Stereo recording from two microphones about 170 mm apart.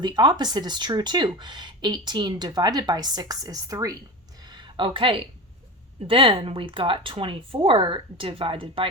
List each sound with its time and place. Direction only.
0.0 s speech: 25° right (ahead or behind)
4.4 s a sound: 25° right (ahead or behind)
6.1 s speech: 30° right (ahead or behind)